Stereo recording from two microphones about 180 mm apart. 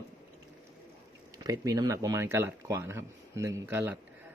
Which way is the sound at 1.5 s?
20° right (ahead or behind).